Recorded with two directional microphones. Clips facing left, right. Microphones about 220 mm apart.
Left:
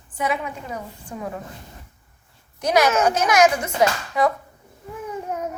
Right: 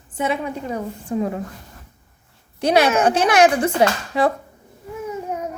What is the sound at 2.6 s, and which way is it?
A woman's voice, 30° right (ahead or behind).